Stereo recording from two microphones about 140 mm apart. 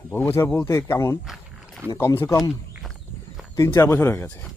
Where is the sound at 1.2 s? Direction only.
Centre (ahead or behind).